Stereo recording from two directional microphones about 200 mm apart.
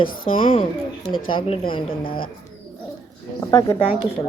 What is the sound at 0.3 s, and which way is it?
Speech, 30° left (ahead or behind).